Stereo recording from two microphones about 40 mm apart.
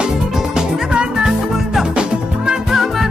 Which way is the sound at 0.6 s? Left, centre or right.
Centre.